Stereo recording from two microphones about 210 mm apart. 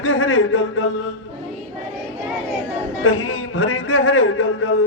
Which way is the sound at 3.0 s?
80° left.